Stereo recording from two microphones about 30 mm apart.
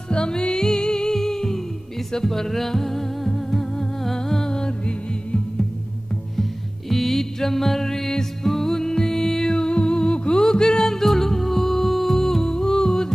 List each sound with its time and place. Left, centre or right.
0.1 s music: left
2.1 s humming: centre
6.9 s music: centre
9.6 s music: left